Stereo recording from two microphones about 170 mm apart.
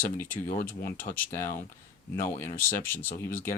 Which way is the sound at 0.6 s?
60° left (ahead or behind).